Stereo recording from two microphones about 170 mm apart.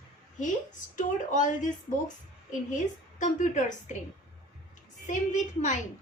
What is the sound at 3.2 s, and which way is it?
Speech, 45° left (ahead or behind).